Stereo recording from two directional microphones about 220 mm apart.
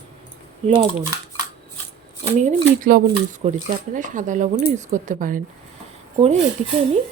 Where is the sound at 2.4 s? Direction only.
40° right (ahead or behind).